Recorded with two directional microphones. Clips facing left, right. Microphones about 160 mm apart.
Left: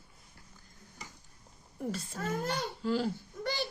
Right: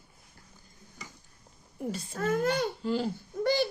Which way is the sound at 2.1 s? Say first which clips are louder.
Right 9 dB; 60° right (ahead or behind).